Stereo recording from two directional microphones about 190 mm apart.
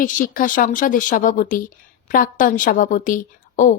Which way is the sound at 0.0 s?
45° left (ahead or behind).